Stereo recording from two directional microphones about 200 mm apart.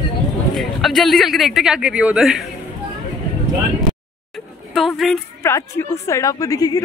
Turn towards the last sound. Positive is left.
turn(degrees=20)  # may be behind; listen again after turning